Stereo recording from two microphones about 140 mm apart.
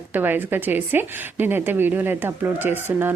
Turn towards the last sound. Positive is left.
turn(degrees=-15)  # may be behind; listen again after turning